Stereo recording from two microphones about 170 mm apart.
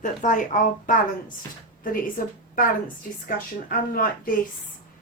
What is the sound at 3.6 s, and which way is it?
Speech, 55° left (ahead or behind).